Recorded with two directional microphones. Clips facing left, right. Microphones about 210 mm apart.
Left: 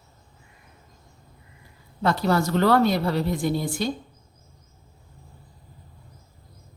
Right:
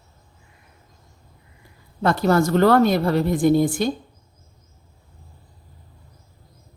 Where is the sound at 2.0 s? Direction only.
50° right (ahead or behind).